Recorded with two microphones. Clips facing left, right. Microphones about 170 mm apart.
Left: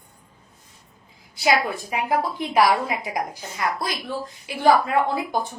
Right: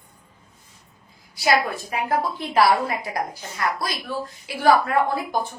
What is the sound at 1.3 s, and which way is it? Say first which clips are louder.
A woman's voice: even; 15° left (ahead or behind).